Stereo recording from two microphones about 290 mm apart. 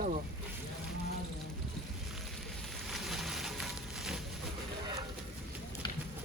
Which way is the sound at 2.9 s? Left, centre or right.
Centre.